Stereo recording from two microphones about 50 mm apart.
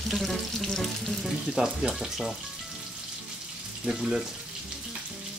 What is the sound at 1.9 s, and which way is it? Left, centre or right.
Speech, centre.